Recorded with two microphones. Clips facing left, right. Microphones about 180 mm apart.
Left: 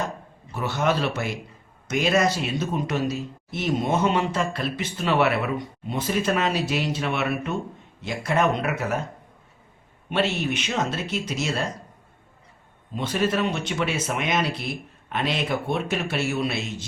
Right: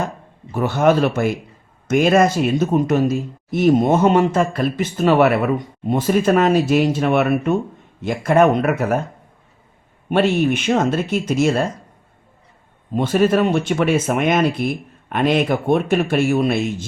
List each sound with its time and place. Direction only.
0.5 s speech: 50° right (ahead or behind)
10.1 s speech: 50° right (ahead or behind)
12.9 s speech: 50° right (ahead or behind)